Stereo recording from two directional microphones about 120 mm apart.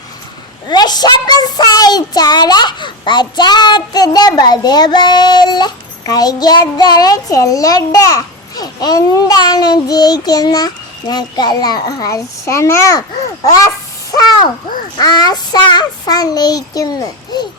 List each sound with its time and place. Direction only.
0.7 s child singing: 35° left (ahead or behind)
11.1 s a child's voice: 35° left (ahead or behind)
14.9 s child singing: 35° left (ahead or behind)